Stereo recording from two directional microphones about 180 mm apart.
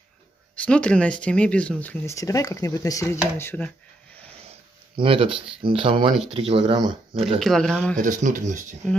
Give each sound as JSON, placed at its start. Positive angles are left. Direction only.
{"t": 0.6, "sound": "speech", "side_deg": 5}
{"t": 4.9, "sound": "speech", "side_deg": -30}
{"t": 7.3, "sound": "speech", "side_deg": 0}
{"t": 8.0, "sound": "speech", "side_deg": -45}